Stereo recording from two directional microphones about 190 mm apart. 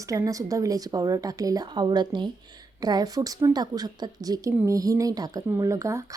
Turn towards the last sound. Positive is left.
turn(degrees=-15)  # may be behind; listen again after turning